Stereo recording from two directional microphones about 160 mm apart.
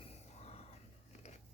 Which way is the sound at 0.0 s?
40° left (ahead or behind).